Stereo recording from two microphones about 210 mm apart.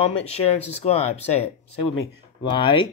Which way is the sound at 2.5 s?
20° left (ahead or behind).